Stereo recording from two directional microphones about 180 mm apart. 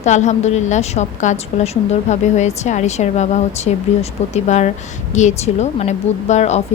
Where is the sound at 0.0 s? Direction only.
40° left (ahead or behind).